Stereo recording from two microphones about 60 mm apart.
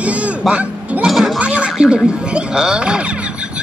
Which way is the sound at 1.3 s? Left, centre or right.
Centre.